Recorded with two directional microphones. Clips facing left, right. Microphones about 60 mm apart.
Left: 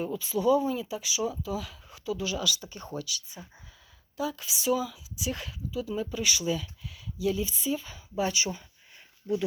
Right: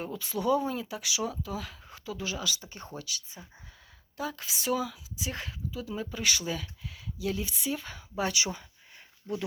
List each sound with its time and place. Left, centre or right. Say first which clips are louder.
0.0 s speech: left 4 dB; right
5.1 s speech: left 2 dB; right
8.3 s speech: left 1 dB; right